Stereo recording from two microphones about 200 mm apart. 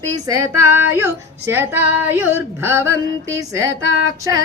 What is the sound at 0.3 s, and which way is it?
Female singing, 15° right (ahead or behind).